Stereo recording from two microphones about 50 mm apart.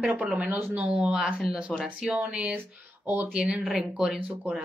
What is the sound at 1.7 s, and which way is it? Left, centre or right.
Speech, centre.